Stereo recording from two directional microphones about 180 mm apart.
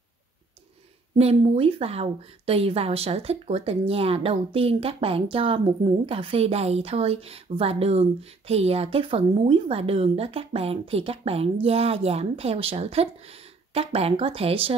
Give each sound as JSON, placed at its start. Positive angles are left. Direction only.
{"t": 1.1, "sound": "a woman's voice", "side_deg": -35}